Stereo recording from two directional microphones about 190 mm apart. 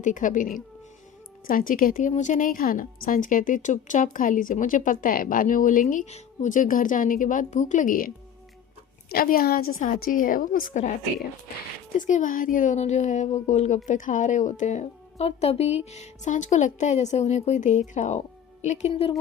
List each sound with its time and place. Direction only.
0.0 s a woman's voice: 45° left (ahead or behind)
11.9 s a woman's voice: 40° left (ahead or behind)